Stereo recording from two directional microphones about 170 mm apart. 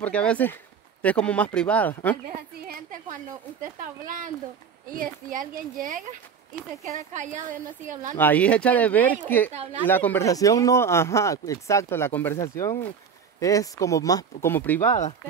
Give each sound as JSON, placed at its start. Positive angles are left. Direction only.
{"t": 0.0, "sound": "speech", "side_deg": 5}
{"t": 2.6, "sound": "a woman's voice", "side_deg": -60}
{"t": 8.2, "sound": "speech", "side_deg": 10}
{"t": 9.5, "sound": "speech", "side_deg": -40}
{"t": 9.8, "sound": "speech", "side_deg": 10}
{"t": 14.9, "sound": "speech", "side_deg": 45}